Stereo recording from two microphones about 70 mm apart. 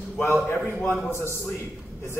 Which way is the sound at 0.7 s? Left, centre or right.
Left.